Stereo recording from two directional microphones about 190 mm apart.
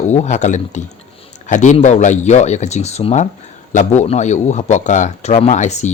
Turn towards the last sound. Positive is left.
turn(degrees=35)  # may be behind; listen again after turning